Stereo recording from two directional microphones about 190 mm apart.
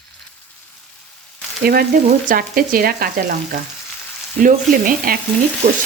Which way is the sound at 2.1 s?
45° right (ahead or behind).